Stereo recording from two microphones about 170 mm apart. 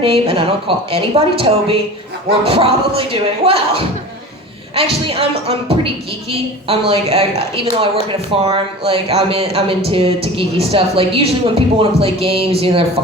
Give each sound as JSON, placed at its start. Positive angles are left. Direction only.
{"t": 0.0, "sound": "speech", "side_deg": -35}